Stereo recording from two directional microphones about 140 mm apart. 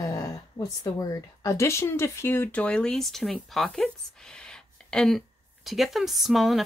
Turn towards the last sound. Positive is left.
turn(degrees=0)  # may be behind; listen again after turning